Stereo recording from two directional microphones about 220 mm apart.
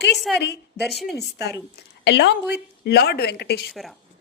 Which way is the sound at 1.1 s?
50° left (ahead or behind).